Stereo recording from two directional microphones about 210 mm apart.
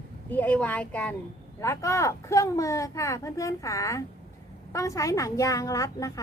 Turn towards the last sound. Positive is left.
turn(degrees=15)  # may be behind; listen again after turning